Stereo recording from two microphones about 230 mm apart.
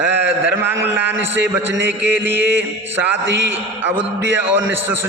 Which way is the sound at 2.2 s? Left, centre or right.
Centre.